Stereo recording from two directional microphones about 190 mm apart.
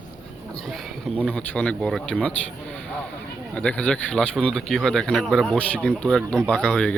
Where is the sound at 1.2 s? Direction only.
5° left (ahead or behind).